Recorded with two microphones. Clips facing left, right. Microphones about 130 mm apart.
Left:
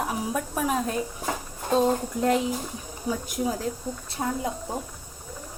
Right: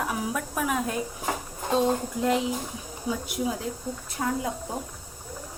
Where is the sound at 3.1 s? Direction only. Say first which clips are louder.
Left 1 dB; 40° left (ahead or behind).